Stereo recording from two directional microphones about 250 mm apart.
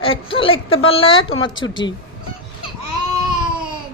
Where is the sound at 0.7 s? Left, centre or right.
Left.